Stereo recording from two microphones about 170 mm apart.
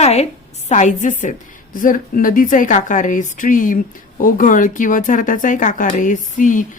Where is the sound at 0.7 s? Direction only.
45° left (ahead or behind).